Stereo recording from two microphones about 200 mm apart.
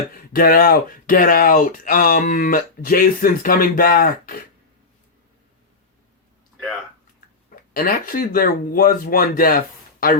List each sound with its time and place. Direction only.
0.3 s speech: 45° left (ahead or behind)
7.7 s speech: 45° left (ahead or behind)